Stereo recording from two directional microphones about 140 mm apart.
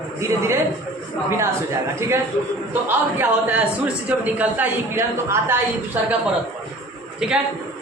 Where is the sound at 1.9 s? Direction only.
20° right (ahead or behind).